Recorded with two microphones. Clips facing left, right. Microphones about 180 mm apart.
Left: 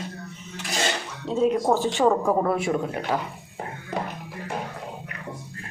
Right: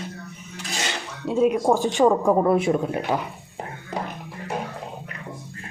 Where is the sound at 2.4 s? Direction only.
20° right (ahead or behind).